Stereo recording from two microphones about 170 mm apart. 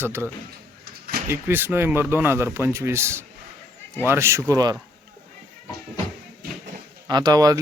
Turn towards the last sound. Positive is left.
turn(degrees=-20)  # may be behind; listen again after turning